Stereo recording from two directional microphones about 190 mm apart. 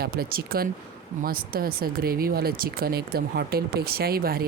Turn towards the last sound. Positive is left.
turn(degrees=-50)  # may be behind; listen again after turning